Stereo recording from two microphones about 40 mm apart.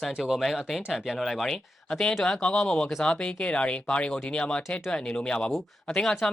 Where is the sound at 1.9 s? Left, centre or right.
Centre.